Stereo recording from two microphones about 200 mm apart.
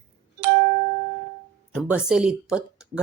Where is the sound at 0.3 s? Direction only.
50° right (ahead or behind).